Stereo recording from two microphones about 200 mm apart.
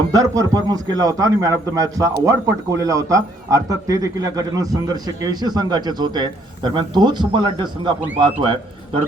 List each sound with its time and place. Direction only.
0.1 s a man's voice: 15° right (ahead or behind)